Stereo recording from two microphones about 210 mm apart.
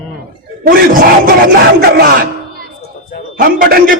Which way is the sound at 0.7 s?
40° right (ahead or behind).